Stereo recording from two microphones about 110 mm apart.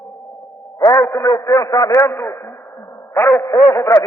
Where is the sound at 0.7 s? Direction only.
30° left (ahead or behind).